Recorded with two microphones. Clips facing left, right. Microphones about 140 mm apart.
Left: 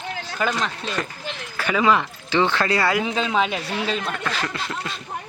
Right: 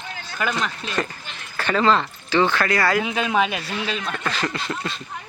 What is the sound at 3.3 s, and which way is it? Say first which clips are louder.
Speech: right 1 dB; 20° left (ahead or behind).